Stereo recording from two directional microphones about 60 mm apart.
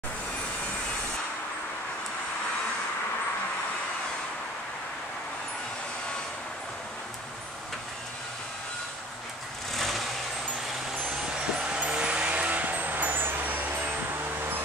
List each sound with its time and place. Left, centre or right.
9.8 s vehicle: centre
11.6 s vehicle: centre